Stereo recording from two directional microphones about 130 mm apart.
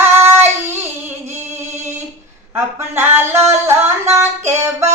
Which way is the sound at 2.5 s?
20° right (ahead or behind).